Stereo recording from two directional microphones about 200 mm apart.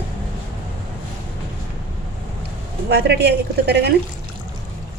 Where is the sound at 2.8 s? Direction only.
55° right (ahead or behind).